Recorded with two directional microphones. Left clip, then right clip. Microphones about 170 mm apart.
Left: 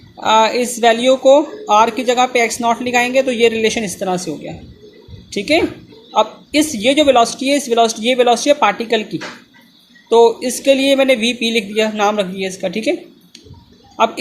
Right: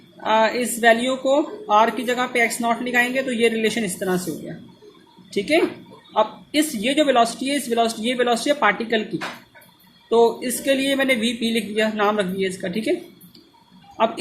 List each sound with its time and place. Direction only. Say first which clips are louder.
0.2 s speech: left 6 dB; 25° left (ahead or behind)
5.3 s speech: left 4 dB; 25° left (ahead or behind)
10.1 s speech: left 6 dB; 25° left (ahead or behind)